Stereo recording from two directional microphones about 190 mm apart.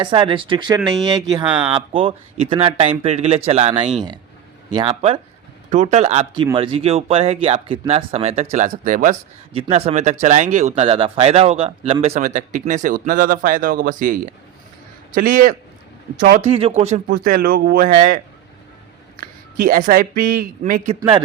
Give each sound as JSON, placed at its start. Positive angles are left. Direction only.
{"t": 0.0, "sound": "speech", "side_deg": -25}
{"t": 1.5, "sound": "speech", "side_deg": -5}
{"t": 1.7, "sound": "speech", "side_deg": -30}
{"t": 5.7, "sound": "speech", "side_deg": -40}
{"t": 9.5, "sound": "speech", "side_deg": -30}
{"t": 16.4, "sound": "speech", "side_deg": -30}
{"t": 17.1, "sound": "speech", "side_deg": -50}
{"t": 19.6, "sound": "speech", "side_deg": -45}